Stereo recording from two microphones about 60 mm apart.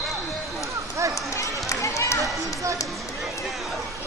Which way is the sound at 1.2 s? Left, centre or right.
Left.